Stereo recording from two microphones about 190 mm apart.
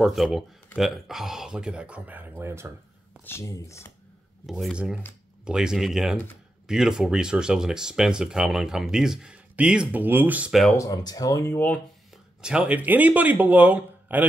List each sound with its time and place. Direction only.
0.0 s speech: centre (ahead or behind)
3.3 s speech: 15° left (ahead or behind)
4.5 s speech: centre (ahead or behind)
10.8 s speech: 20° left (ahead or behind)
12.4 s speech: 5° right (ahead or behind)